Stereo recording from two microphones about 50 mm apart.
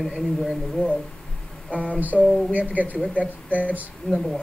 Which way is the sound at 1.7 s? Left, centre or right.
Right.